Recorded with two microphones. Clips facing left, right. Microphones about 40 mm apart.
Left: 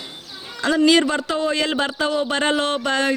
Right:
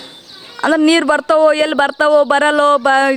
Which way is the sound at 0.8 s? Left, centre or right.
Right.